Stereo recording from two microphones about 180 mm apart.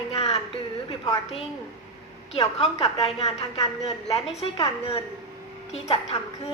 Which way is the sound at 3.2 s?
20° left (ahead or behind).